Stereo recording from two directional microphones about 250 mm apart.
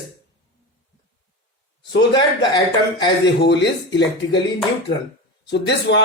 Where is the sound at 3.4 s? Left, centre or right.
Left.